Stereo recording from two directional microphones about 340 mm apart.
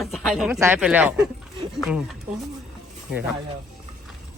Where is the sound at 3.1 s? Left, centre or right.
Centre.